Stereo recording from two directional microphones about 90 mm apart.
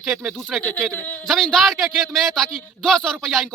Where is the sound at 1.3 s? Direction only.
5° left (ahead or behind).